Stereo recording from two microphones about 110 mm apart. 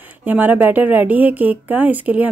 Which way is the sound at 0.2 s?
15° right (ahead or behind).